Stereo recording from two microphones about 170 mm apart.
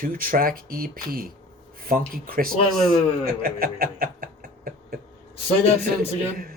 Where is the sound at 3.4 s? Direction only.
60° right (ahead or behind).